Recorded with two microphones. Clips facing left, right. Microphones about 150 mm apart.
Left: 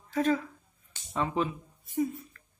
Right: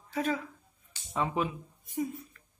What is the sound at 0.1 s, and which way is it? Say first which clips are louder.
Speech: left 4 dB; 5° right (ahead or behind).